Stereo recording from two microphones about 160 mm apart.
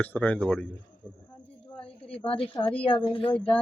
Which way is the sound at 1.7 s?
35° left (ahead or behind).